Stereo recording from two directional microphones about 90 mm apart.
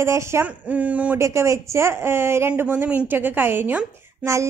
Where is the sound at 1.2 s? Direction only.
35° right (ahead or behind).